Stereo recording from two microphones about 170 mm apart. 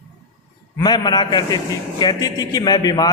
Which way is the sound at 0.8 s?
25° left (ahead or behind).